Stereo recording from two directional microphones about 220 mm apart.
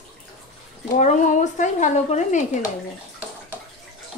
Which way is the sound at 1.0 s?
35° left (ahead or behind).